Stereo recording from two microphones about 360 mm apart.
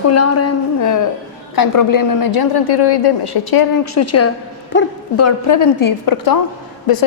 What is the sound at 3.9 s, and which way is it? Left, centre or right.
A woman's voice, left.